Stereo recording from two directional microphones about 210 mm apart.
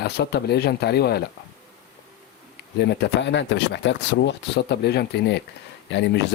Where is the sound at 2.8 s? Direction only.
50° left (ahead or behind).